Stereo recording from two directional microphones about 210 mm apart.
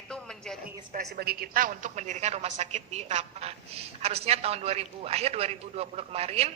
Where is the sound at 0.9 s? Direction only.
50° right (ahead or behind).